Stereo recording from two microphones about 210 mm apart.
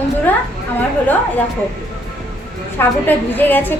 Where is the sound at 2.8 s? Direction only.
10° left (ahead or behind).